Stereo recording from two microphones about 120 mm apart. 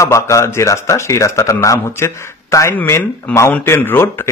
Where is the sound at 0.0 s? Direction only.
25° left (ahead or behind).